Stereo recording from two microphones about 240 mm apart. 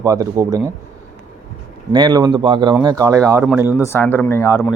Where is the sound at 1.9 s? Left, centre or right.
Centre.